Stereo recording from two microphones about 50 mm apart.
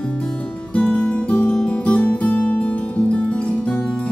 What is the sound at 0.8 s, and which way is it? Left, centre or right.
Music, left.